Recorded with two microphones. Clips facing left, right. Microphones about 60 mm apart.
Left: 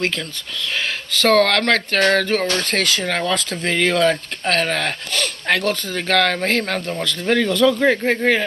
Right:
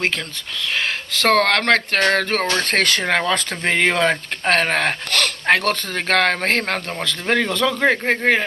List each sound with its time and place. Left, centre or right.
0.7 s speech: right
8.2 s speech: right